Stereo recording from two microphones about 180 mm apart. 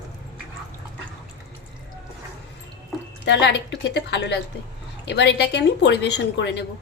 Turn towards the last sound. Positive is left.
turn(degrees=70)  # may be behind; listen again after turning